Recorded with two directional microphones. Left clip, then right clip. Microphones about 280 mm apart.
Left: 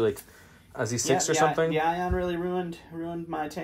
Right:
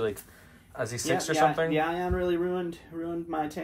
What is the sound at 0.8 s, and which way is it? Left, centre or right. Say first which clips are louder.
Speech: left 3 dB; left.